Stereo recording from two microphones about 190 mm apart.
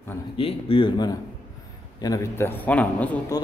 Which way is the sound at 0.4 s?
30° left (ahead or behind).